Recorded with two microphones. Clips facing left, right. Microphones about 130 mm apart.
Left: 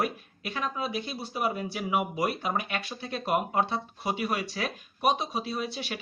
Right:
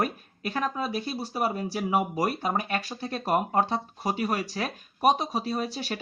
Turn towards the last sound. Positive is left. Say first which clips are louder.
# right 3 dB
turn(degrees=-40)  # may be behind; listen again after turning